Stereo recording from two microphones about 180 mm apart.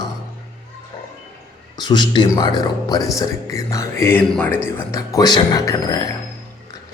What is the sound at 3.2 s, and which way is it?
Speech, 15° left (ahead or behind).